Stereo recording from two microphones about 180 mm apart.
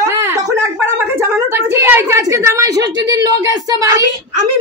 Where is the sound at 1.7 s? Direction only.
15° right (ahead or behind).